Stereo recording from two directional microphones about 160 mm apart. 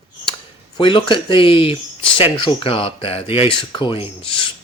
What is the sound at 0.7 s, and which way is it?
Speech, 30° left (ahead or behind).